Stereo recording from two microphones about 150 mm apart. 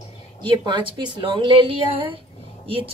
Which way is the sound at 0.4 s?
35° right (ahead or behind).